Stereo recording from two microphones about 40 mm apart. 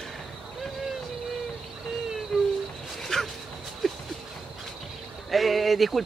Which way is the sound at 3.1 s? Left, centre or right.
Centre.